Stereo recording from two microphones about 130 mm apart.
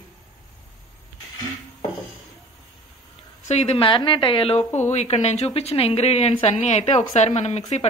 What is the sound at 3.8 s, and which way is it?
Speech, 40° left (ahead or behind).